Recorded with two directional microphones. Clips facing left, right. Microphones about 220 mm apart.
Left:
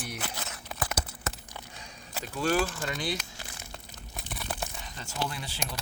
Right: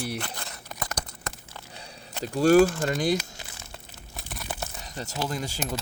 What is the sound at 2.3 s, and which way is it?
Speech, 45° right (ahead or behind).